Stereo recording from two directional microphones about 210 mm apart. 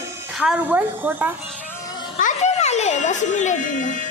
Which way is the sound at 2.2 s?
35° left (ahead or behind).